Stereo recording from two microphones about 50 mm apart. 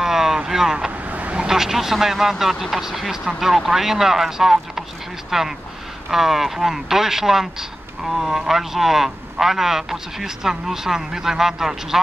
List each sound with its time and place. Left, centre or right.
0.0 s boat: centre
0.5 s vehicle: centre
1.1 s vehicle: right
1.5 s a man's voice: centre